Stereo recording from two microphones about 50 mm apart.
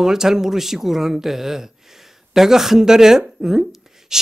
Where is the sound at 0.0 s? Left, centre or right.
Centre.